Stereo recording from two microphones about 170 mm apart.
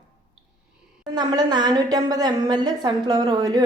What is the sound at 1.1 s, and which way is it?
A woman's voice, 25° right (ahead or behind).